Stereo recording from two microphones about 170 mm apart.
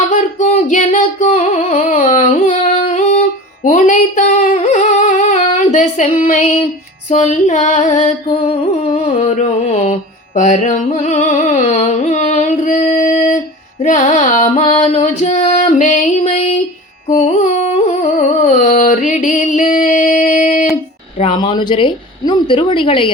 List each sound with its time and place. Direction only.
0.1 s singing: 45° left (ahead or behind)
7.1 s mantra: 45° left (ahead or behind)
15.5 s music: 45° left (ahead or behind)
17.1 s carnatic music: 45° left (ahead or behind)
20.1 s a sound: 45° left (ahead or behind)
21.2 s speech: 30° left (ahead or behind)